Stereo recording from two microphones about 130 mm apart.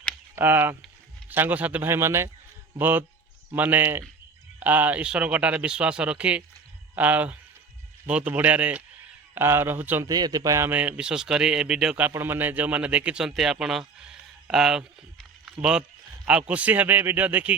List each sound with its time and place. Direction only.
0.3 s a man's voice: 15° right (ahead or behind)
10.1 s speech: 30° right (ahead or behind)
10.7 s a man's voice: 10° right (ahead or behind)